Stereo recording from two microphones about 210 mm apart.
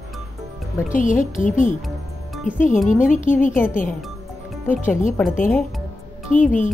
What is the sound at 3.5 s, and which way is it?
Speech, 10° left (ahead or behind).